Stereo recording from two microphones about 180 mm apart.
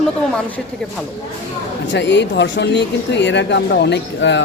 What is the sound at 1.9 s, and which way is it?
Speech, 75° left (ahead or behind).